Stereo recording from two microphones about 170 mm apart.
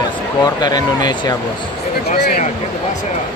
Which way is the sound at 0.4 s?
25° left (ahead or behind).